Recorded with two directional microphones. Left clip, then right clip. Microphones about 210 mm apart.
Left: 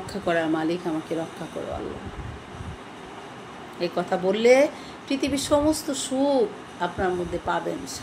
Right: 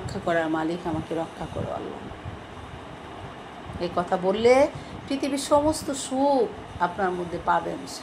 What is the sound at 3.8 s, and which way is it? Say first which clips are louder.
A woman's voice: even; 10° left (ahead or behind).